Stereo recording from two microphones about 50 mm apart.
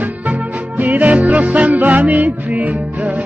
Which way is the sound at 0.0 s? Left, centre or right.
Right.